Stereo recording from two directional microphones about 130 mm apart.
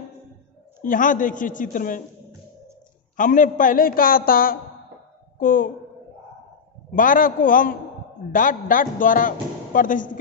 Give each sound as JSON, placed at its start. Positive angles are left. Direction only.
{"t": 0.8, "sound": "a man's voice", "side_deg": 90}
{"t": 3.2, "sound": "a man's voice", "side_deg": 90}
{"t": 7.0, "sound": "a man's voice", "side_deg": 90}